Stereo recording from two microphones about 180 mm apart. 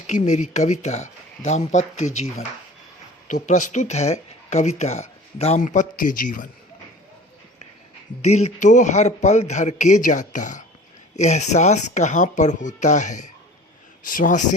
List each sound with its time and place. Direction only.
0.1 s speech: 40° left (ahead or behind)
8.2 s speech: 40° left (ahead or behind)